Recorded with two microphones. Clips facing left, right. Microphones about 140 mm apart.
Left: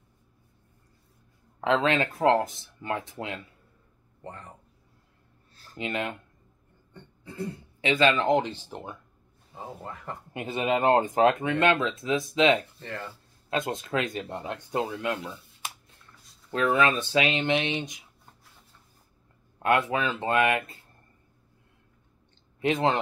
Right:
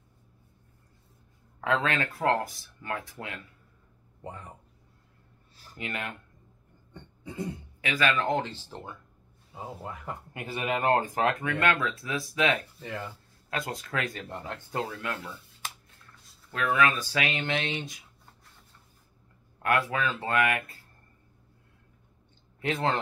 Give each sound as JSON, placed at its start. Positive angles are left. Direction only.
{"t": 1.6, "sound": "speech", "side_deg": 20}
{"t": 4.2, "sound": "speech", "side_deg": -10}
{"t": 5.8, "sound": "speech", "side_deg": 20}
{"t": 6.9, "sound": "a sound", "side_deg": -15}
{"t": 7.8, "sound": "speech", "side_deg": 25}
{"t": 9.6, "sound": "speech", "side_deg": -5}
{"t": 10.3, "sound": "speech", "side_deg": 20}
{"t": 12.7, "sound": "speech", "side_deg": -5}
{"t": 13.5, "sound": "speech", "side_deg": 20}
{"t": 19.6, "sound": "speech", "side_deg": 20}
{"t": 22.6, "sound": "speech", "side_deg": 20}